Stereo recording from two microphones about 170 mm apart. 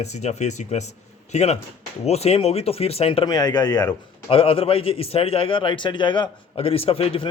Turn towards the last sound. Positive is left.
turn(degrees=35)  # may be behind; listen again after turning